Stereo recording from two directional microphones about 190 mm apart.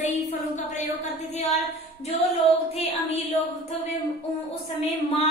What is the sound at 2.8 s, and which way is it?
Speech, 35° left (ahead or behind).